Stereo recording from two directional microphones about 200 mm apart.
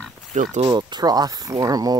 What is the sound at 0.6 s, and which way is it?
Speech, 20° right (ahead or behind).